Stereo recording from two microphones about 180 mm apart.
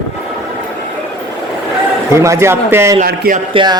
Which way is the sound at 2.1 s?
15° right (ahead or behind).